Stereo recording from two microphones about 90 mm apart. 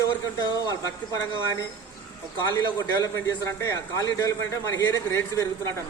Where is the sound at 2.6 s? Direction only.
35° left (ahead or behind).